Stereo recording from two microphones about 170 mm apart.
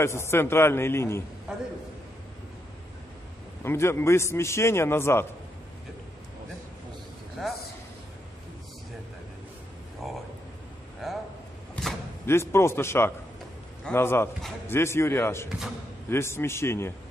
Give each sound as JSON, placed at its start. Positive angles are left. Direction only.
{"t": 0.0, "sound": "a man's voice", "side_deg": 15}
{"t": 1.5, "sound": "a sound", "side_deg": -5}
{"t": 3.6, "sound": "a man's voice", "side_deg": 15}
{"t": 7.4, "sound": "speech", "side_deg": 0}
{"t": 10.0, "sound": "a sound", "side_deg": 0}
{"t": 12.3, "sound": "a man's voice", "side_deg": 15}